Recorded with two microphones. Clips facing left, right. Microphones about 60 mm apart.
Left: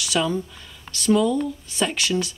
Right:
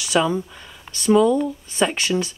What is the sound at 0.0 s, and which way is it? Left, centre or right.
Speech, centre.